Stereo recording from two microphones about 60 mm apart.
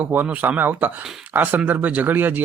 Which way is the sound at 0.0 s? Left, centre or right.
Right.